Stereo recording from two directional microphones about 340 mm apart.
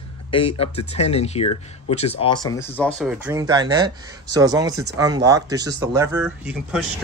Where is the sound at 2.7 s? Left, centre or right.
Centre.